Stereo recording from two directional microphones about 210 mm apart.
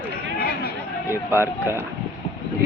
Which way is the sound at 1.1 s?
10° right (ahead or behind).